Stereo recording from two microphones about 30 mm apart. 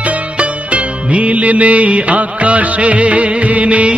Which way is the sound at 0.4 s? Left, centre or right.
Right.